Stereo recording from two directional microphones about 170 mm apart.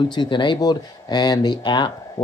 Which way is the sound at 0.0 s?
25° left (ahead or behind).